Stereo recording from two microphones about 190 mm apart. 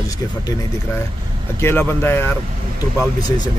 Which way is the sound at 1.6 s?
10° left (ahead or behind).